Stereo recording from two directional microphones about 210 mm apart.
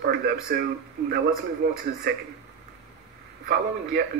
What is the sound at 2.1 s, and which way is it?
Speech, 50° right (ahead or behind).